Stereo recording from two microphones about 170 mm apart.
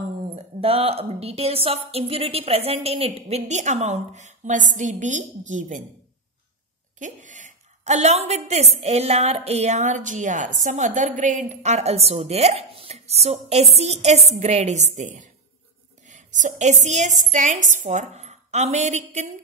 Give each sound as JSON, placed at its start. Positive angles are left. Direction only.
{"t": 0.2, "sound": "a woman's voice", "side_deg": -35}
{"t": 7.0, "sound": "a woman's voice", "side_deg": -45}